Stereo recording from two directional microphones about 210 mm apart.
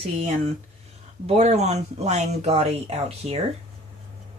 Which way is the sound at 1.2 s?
30° right (ahead or behind).